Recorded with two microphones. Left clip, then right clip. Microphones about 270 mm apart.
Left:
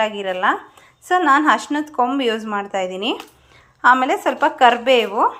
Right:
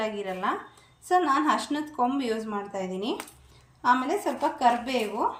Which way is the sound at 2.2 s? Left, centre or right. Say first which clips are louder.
Left 9 dB; left.